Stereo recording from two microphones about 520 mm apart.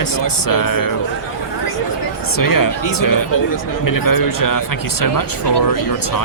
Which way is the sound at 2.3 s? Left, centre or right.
Left.